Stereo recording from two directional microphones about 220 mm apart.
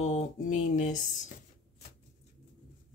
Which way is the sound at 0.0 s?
35° left (ahead or behind).